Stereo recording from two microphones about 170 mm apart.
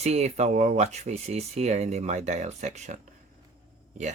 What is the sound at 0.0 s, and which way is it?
Speech, 40° right (ahead or behind).